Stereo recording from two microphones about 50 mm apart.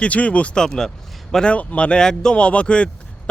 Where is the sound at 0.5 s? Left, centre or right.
Centre.